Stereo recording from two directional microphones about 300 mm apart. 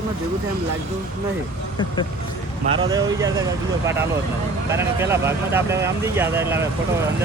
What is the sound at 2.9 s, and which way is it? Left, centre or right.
Speech, centre.